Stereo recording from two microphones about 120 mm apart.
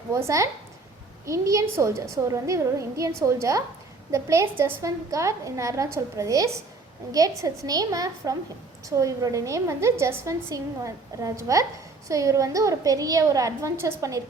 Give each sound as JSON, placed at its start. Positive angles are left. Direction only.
{"t": 0.1, "sound": "a woman's voice", "side_deg": -25}